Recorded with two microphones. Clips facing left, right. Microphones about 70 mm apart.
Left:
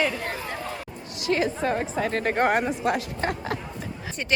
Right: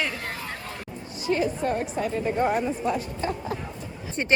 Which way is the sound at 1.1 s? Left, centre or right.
Left.